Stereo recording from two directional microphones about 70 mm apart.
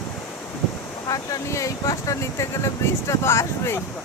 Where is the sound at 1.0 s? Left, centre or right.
Left.